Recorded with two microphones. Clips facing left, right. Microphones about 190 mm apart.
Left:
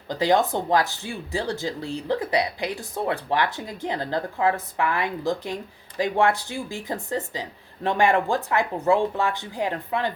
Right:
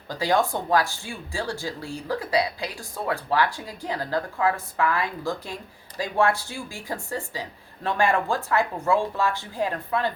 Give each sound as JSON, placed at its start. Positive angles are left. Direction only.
{"t": 0.1, "sound": "speech", "side_deg": 20}